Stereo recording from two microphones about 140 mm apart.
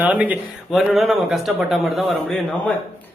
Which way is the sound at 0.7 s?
Centre (ahead or behind).